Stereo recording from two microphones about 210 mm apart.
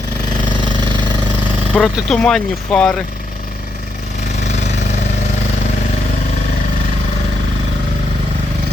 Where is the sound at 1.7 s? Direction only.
5° left (ahead or behind).